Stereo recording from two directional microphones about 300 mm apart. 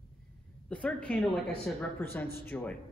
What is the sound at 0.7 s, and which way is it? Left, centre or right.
Speech, centre.